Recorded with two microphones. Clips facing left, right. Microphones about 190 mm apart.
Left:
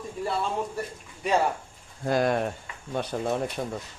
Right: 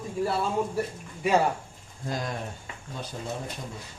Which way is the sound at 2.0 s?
65° left (ahead or behind).